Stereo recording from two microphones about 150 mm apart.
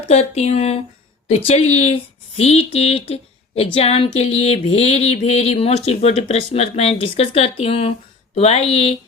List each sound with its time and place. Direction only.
0.1 s speech: 45° left (ahead or behind)
1.8 s speech: 45° left (ahead or behind)